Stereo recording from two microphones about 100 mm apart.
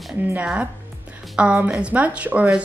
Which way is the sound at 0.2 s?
15° right (ahead or behind).